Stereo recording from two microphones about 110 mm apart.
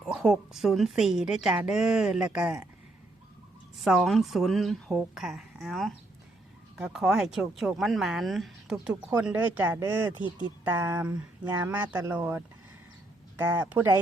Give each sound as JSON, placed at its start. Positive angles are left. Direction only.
{"t": 0.0, "sound": "a woman's voice", "side_deg": -5}
{"t": 3.8, "sound": "a woman's voice", "side_deg": 0}